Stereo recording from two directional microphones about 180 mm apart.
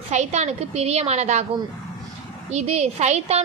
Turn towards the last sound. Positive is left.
turn(degrees=-35)  # may be behind; listen again after turning